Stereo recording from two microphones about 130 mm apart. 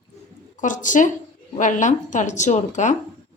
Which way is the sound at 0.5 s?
75° left (ahead or behind).